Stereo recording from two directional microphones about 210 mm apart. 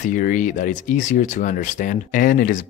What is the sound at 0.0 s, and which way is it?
Speech, 40° left (ahead or behind).